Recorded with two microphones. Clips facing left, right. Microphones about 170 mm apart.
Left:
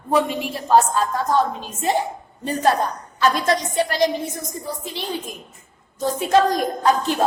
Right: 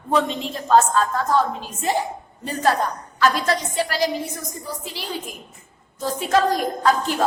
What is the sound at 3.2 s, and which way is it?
Speech, 20° left (ahead or behind).